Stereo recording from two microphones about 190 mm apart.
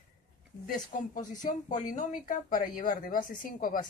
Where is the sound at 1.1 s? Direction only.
40° left (ahead or behind).